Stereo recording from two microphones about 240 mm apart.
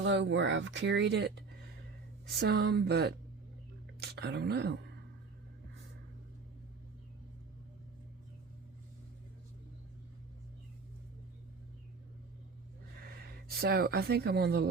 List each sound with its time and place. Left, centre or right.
0.0 s speech: right
13.1 s speech: right